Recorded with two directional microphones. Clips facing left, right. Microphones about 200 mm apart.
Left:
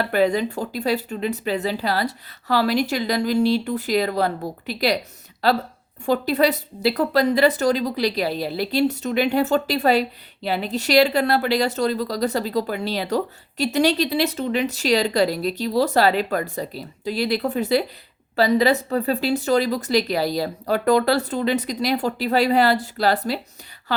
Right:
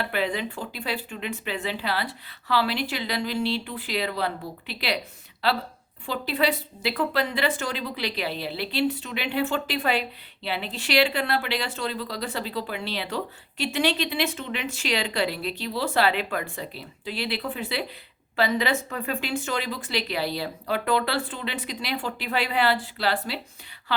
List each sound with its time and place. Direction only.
0.0 s a woman's voice: 40° left (ahead or behind)